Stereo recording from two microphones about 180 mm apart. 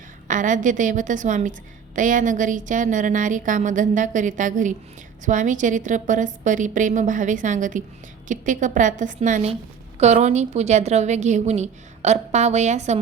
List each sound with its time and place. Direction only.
0.3 s a woman's voice: 45° right (ahead or behind)